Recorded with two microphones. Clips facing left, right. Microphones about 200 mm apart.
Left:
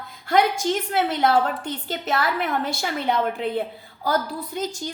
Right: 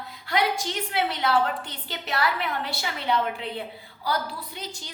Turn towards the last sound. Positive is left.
turn(degrees=45)  # may be behind; listen again after turning